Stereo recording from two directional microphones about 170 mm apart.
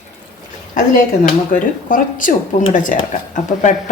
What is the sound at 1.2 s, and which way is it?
Speech, 50° left (ahead or behind).